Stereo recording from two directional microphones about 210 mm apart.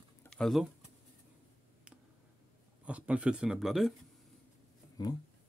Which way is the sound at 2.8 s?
5° right (ahead or behind).